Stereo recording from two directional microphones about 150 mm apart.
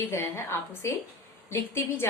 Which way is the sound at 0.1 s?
15° left (ahead or behind).